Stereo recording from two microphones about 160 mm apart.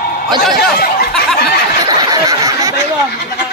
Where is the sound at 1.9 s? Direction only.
25° right (ahead or behind).